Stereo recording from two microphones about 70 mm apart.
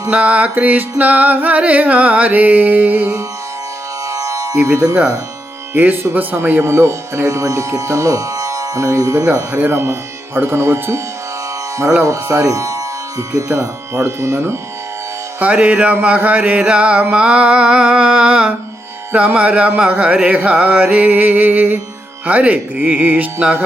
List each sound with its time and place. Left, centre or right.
0.1 s music: right
4.1 s music: right
4.6 s speech: right
9.3 s speech: right
12.0 s speech: right
15.4 s music: right